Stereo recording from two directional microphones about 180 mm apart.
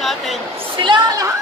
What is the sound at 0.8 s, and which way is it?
Speech, 25° right (ahead or behind).